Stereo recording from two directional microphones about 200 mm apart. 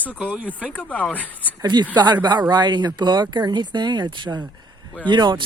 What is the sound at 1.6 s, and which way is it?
Speech, 20° right (ahead or behind).